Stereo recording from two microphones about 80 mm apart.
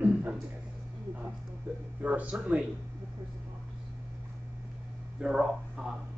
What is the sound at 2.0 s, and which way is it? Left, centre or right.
Speech, centre.